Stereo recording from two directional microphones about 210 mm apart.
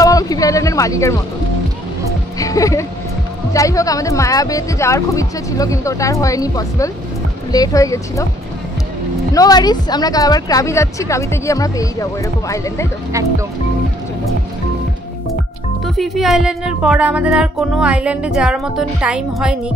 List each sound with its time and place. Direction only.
0.0 s a sound: 15° left (ahead or behind)
2.3 s speech: 15° left (ahead or behind)
9.3 s speech: 20° left (ahead or behind)
15.8 s speech: centre (ahead or behind)